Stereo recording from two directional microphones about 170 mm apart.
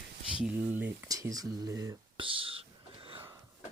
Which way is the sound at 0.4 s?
10° right (ahead or behind).